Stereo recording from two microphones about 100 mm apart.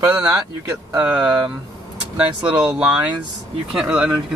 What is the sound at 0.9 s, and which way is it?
Speech, 15° right (ahead or behind).